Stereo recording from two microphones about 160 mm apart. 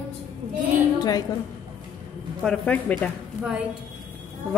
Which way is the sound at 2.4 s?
5° left (ahead or behind).